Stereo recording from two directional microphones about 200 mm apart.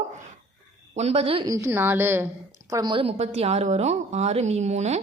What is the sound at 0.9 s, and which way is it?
A woman's voice, 30° right (ahead or behind).